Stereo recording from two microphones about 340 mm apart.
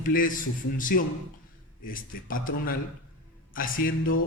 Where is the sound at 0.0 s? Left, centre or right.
Left.